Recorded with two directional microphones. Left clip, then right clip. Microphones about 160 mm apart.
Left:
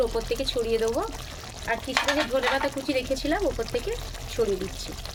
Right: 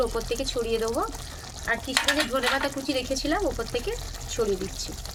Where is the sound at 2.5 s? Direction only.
5° left (ahead or behind).